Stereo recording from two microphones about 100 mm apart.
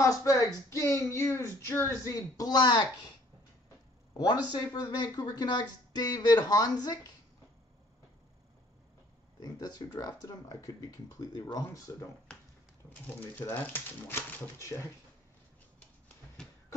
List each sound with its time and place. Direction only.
0.0 s music: 30° left (ahead or behind)
0.7 s speech: 30° left (ahead or behind); by 2.9 s 45° left (ahead or behind)
4.6 s speech: 40° left (ahead or behind)
9.4 s speech: 40° left (ahead or behind)
13.4 s speech: 15° left (ahead or behind)